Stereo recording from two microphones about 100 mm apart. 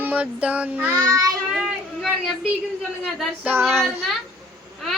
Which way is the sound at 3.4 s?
20° right (ahead or behind).